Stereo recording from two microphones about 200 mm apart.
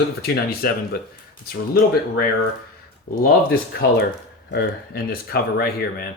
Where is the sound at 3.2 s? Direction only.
50° left (ahead or behind).